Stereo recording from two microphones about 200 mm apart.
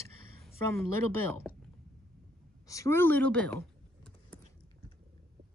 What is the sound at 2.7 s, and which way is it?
Speech, 15° left (ahead or behind).